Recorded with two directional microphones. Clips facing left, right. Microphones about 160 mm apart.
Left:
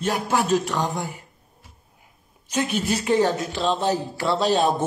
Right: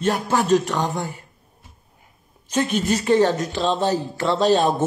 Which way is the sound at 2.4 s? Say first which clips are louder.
Right 3 dB; 10° left (ahead or behind).